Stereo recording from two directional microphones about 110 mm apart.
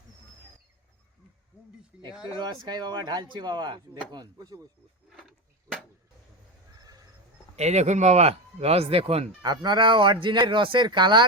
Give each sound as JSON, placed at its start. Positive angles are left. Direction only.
{"t": 2.4, "sound": "speech", "side_deg": -40}
{"t": 5.0, "sound": "a sound", "side_deg": 0}
{"t": 6.7, "sound": "neigh", "side_deg": -35}
{"t": 7.5, "sound": "speech", "side_deg": -90}
{"t": 9.4, "sound": "speech", "side_deg": -40}